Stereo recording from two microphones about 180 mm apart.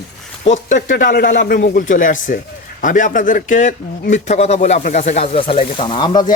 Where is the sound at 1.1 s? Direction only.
65° left (ahead or behind).